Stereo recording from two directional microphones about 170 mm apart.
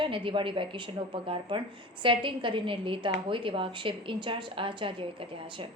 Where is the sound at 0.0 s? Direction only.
30° right (ahead or behind).